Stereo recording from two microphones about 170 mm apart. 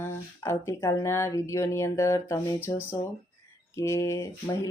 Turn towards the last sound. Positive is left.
turn(degrees=15)  # may be behind; listen again after turning